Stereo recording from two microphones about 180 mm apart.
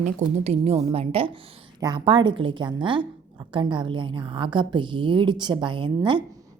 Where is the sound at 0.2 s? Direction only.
35° right (ahead or behind).